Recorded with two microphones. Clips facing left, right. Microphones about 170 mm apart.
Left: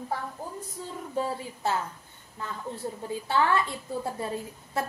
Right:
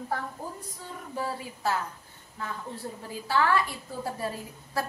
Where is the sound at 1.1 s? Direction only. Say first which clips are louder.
Left 3 dB; 25° left (ahead or behind).